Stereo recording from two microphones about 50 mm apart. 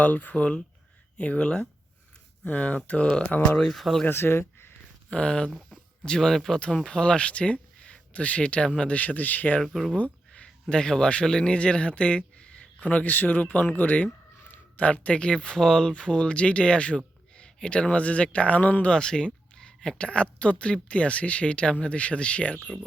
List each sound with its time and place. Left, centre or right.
0.0 s speech: left
3.7 s speech: centre
4.1 s speech: left
5.1 s speech: left
6.6 s speech: centre; by 9.6 s left
9.9 s speech: left
18.9 s speech: centre